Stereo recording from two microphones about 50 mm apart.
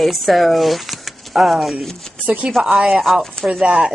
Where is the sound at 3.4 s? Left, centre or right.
Centre.